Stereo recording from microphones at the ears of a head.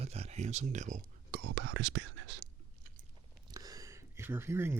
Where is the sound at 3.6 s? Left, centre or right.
Right.